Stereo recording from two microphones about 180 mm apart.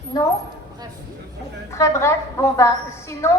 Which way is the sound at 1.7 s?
15° left (ahead or behind).